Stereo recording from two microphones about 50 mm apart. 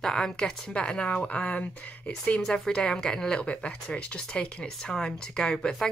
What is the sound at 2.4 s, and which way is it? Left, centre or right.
Speech, centre.